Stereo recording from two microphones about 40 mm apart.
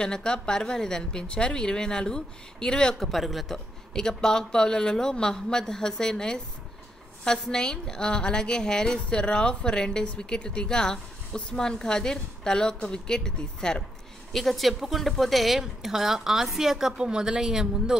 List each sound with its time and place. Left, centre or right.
0.0 s a woman's voice: centre
3.1 s speech: centre
3.5 s a woman's voice: centre
14.3 s a woman's voice: centre